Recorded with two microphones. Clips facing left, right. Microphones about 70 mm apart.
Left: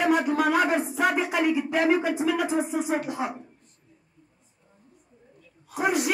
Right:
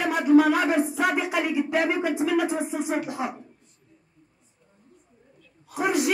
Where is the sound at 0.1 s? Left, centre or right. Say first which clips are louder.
Right 4 dB; centre.